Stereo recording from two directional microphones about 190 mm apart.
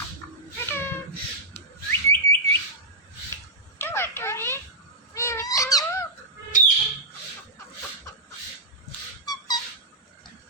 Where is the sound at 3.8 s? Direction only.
10° left (ahead or behind).